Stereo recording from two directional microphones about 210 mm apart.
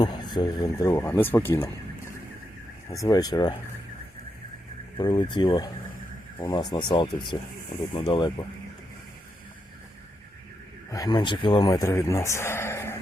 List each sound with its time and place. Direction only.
0.0 s a man's voice: 20° left (ahead or behind)
2.9 s speech: 15° left (ahead or behind)
4.9 s speech: 20° left (ahead or behind)
10.9 s a man's voice: 20° left (ahead or behind)